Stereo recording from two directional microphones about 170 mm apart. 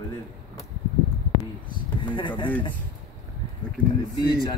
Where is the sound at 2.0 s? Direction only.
30° left (ahead or behind).